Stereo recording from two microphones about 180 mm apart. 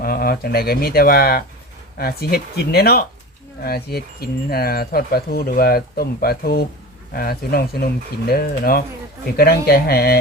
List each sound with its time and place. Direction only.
0.0 s speech: 55° left (ahead or behind)